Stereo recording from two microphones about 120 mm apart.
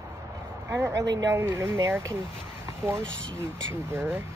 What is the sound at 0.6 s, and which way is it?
Speech, 25° right (ahead or behind).